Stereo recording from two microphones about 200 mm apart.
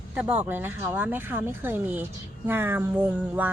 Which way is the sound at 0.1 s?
10° right (ahead or behind).